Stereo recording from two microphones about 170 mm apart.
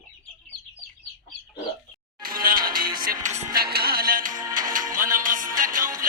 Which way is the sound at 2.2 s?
60° right (ahead or behind).